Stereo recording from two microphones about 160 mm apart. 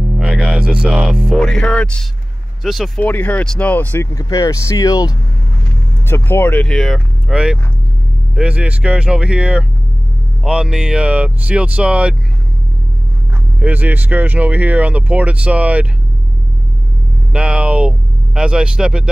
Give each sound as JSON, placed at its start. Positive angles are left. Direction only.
{"t": 0.2, "sound": "speech", "side_deg": -5}
{"t": 3.1, "sound": "speech", "side_deg": 10}
{"t": 13.6, "sound": "speech", "side_deg": -10}
{"t": 17.3, "sound": "speech", "side_deg": -5}